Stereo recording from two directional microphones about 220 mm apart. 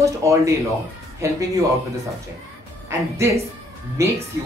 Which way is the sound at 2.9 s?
15° right (ahead or behind).